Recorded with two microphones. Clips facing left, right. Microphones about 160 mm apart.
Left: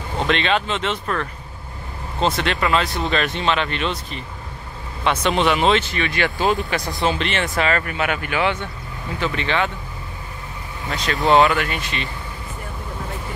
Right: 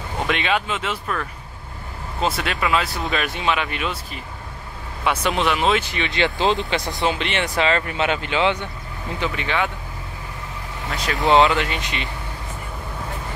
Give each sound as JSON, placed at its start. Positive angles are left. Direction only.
{"t": 0.3, "sound": "speech", "side_deg": -10}
{"t": 2.2, "sound": "speech", "side_deg": -5}
{"t": 5.9, "sound": "speech", "side_deg": -20}
{"t": 9.2, "sound": "speech", "side_deg": -10}
{"t": 10.9, "sound": "speech", "side_deg": 0}
{"t": 11.2, "sound": "speech", "side_deg": -20}